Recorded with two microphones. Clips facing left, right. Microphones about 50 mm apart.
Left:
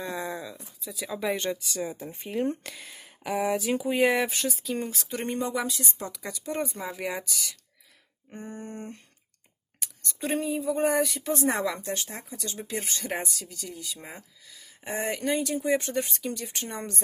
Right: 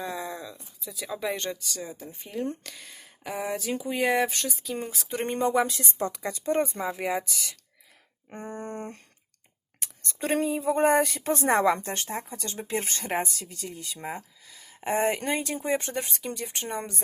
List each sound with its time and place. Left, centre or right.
0.0 s a sound: centre
1.7 s speech: left
2.9 s speech: centre
4.9 s speech: right
6.9 s speech: centre
7.3 s speech: right
10.2 s speech: right
16.6 s speech: centre